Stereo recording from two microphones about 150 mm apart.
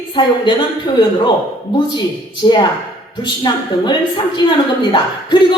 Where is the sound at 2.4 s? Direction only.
30° left (ahead or behind).